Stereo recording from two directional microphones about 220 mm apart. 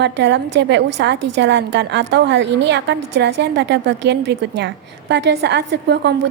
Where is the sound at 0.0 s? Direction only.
50° right (ahead or behind).